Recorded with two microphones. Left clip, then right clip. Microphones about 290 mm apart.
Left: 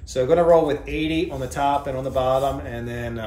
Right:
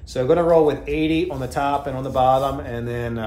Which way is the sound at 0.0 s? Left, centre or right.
Centre.